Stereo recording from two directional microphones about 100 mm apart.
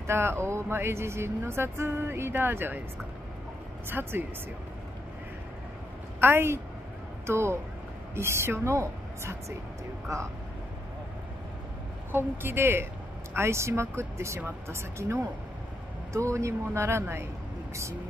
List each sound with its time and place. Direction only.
0.0 s speech: 25° right (ahead or behind)
3.9 s speech: 20° right (ahead or behind)
6.1 s speech: 25° right (ahead or behind)
12.1 s speech: 20° right (ahead or behind)